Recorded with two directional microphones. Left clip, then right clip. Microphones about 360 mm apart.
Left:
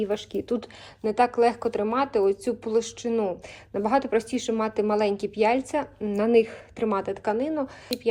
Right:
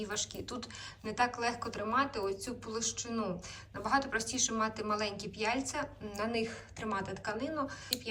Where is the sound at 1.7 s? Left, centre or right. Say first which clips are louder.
Left 8 dB; centre.